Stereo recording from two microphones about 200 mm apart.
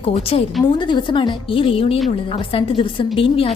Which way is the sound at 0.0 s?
30° left (ahead or behind).